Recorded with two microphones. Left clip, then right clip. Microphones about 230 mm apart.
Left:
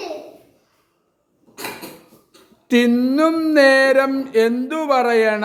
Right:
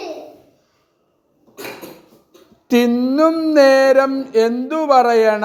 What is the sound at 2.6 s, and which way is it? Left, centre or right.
A man's voice, centre.